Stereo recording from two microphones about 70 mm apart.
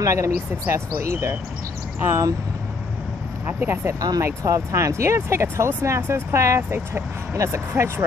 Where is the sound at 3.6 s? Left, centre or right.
Right.